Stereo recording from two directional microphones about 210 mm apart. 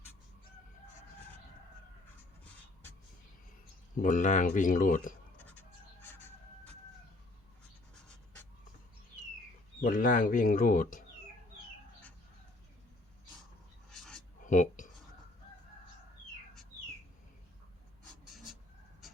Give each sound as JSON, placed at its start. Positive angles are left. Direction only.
{"t": 3.9, "sound": "speech", "side_deg": 40}
{"t": 5.5, "sound": "goat", "side_deg": 10}
{"t": 9.8, "sound": "speech", "side_deg": 40}
{"t": 13.9, "sound": "a sound", "side_deg": 0}
{"t": 14.4, "sound": "speech", "side_deg": 35}